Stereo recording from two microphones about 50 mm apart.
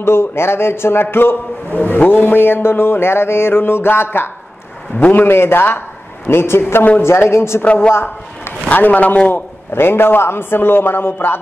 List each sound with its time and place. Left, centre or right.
0.0 s speech: left
1.1 s a man's voice: left
4.9 s a woman's voice: left
5.2 s a man's voice: left
7.6 s a woman's voice: left
7.9 s speech: left
8.6 s a man's voice: left
9.3 s a man's voice: left